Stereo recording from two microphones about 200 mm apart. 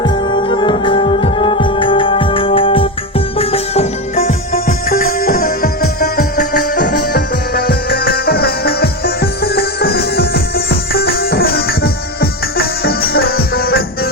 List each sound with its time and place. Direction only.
0.0 s music: 25° left (ahead or behind); by 14.1 s 50° left (ahead or behind)